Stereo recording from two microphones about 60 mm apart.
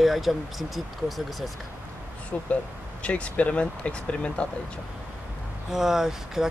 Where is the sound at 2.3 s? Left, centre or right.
Left.